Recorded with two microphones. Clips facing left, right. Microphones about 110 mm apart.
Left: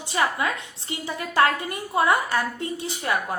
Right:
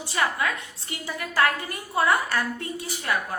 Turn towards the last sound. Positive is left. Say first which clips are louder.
# left 3 dB
turn(degrees=25)  # may be behind; listen again after turning